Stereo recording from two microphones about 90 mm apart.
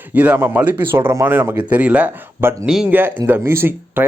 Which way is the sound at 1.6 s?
15° right (ahead or behind).